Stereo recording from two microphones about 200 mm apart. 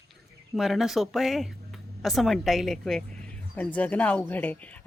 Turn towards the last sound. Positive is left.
turn(degrees=10)  # may be behind; listen again after turning